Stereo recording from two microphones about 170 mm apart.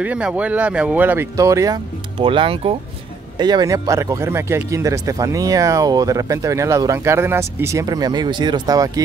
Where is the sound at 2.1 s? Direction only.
30° right (ahead or behind).